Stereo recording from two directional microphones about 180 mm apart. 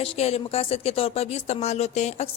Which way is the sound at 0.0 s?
35° left (ahead or behind).